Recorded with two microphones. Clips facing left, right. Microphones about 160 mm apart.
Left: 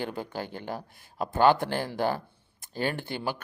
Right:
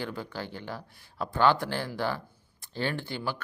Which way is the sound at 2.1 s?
45° left (ahead or behind).